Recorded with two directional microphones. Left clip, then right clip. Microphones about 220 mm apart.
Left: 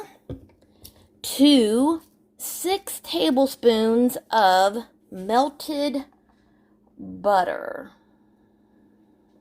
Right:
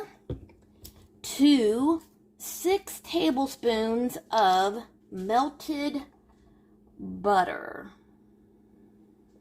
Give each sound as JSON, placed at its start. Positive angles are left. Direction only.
{"t": 1.2, "sound": "speech", "side_deg": 45}
{"t": 7.2, "sound": "speech", "side_deg": 45}